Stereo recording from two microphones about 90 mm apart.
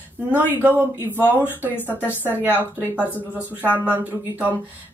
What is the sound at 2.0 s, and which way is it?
Speech, 20° right (ahead or behind).